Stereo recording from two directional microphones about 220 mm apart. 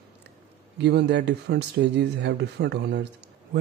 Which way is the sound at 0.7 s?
50° right (ahead or behind).